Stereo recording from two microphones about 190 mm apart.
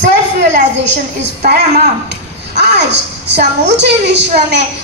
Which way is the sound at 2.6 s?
65° right (ahead or behind).